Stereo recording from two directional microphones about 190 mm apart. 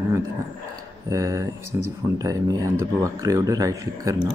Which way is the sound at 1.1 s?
15° right (ahead or behind).